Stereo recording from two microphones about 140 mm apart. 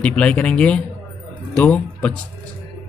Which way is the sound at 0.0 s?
5° left (ahead or behind).